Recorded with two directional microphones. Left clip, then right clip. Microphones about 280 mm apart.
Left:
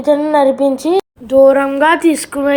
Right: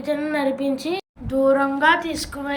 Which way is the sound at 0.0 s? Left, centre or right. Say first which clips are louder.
Left 12 dB; centre.